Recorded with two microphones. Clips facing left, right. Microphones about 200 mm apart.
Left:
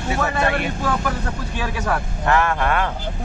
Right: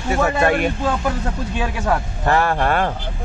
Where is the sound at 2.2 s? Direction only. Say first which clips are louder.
Right 1 dB; 35° right (ahead or behind).